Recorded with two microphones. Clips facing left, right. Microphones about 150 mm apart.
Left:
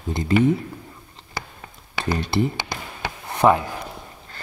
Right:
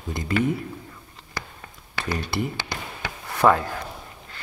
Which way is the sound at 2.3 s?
25° left (ahead or behind).